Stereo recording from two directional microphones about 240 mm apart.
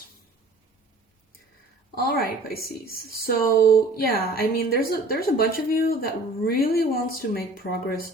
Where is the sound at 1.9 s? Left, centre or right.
Left.